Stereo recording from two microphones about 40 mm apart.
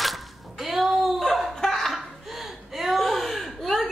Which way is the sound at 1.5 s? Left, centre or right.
Centre.